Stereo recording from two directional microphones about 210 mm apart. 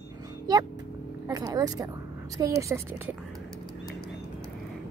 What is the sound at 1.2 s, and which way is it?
Speech, 15° right (ahead or behind).